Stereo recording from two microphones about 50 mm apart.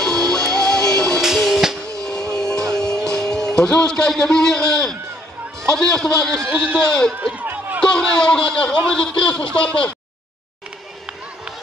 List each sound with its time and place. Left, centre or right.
0.0 s music: centre
1.2 s music: centre
2.0 s vehicle: centre
2.7 s music: centre
5.7 s a man's voice: centre
7.3 s run: right
7.8 s a sound: centre
8.8 s a man's voice: centre